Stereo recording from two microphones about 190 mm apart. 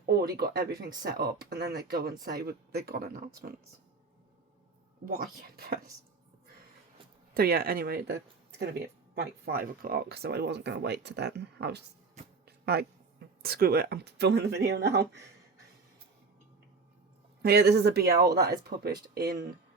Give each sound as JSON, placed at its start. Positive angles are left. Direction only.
{"t": 0.0, "sound": "speech", "side_deg": -55}
{"t": 5.0, "sound": "speech", "side_deg": -50}
{"t": 7.3, "sound": "speech", "side_deg": -55}
{"t": 12.5, "sound": "a sound", "side_deg": -55}
{"t": 13.4, "sound": "speech", "side_deg": -55}
{"t": 17.4, "sound": "speech", "side_deg": -55}